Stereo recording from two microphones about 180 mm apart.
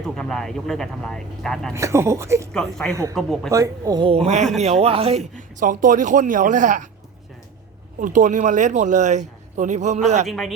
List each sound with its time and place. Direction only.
0.0 s speech: 5° left (ahead or behind)
1.7 s speech: 15° right (ahead or behind)
2.5 s speech: 5° left (ahead or behind)
2.9 s speech: 15° right (ahead or behind)
3.2 s speech: centre (ahead or behind)
3.5 s speech: 20° right (ahead or behind); by 6.8 s 45° right (ahead or behind)
8.0 s speech: 45° right (ahead or behind)
10.2 s speech: centre (ahead or behind)